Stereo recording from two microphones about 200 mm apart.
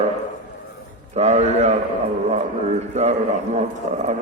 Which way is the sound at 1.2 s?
35° right (ahead or behind).